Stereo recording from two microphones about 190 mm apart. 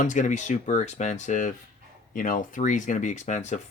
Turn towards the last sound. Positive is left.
turn(degrees=40)  # may be behind; listen again after turning